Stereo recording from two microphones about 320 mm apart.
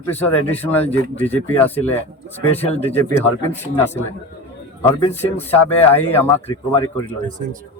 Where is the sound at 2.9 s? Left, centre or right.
Centre.